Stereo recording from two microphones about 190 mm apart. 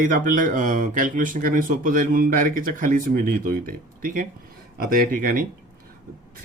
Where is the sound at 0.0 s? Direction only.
45° right (ahead or behind).